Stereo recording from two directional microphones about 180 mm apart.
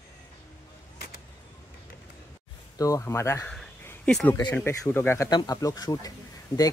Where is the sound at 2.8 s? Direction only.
15° left (ahead or behind).